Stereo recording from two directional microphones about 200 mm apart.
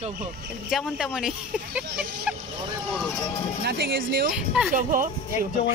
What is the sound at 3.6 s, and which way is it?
Speech, 55° right (ahead or behind).